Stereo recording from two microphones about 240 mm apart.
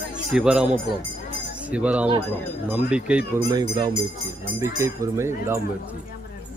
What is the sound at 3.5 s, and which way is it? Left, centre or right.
Speech, centre.